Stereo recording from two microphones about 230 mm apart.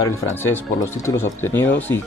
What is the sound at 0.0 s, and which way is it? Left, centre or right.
Speech, centre.